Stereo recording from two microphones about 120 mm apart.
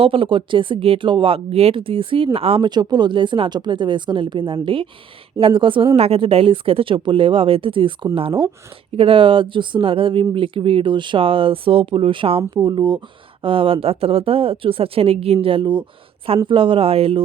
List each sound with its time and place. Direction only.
0.0 s speech: 50° right (ahead or behind)
2.6 s speech: 35° right (ahead or behind)